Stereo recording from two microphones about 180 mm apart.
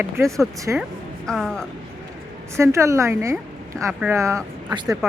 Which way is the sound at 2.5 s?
15° right (ahead or behind).